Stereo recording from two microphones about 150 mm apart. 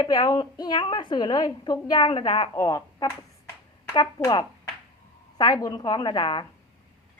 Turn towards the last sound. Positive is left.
turn(degrees=30)  # may be behind; listen again after turning